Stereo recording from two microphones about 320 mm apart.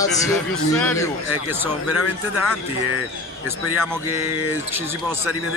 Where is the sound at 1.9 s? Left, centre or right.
Left.